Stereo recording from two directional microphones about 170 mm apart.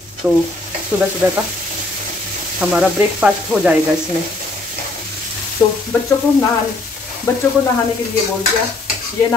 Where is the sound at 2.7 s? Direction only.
5° right (ahead or behind).